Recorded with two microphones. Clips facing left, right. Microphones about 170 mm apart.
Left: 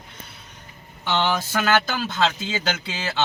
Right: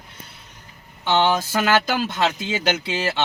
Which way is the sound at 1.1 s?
20° right (ahead or behind).